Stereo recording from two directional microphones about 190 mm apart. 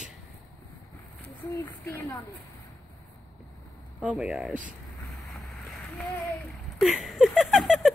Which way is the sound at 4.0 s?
5° right (ahead or behind).